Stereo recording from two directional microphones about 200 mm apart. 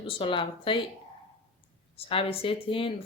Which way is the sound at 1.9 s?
30° left (ahead or behind).